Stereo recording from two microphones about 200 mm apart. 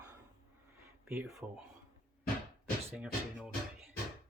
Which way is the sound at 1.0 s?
10° right (ahead or behind).